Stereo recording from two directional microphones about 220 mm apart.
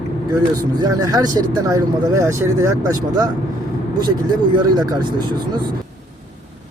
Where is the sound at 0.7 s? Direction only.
15° right (ahead or behind).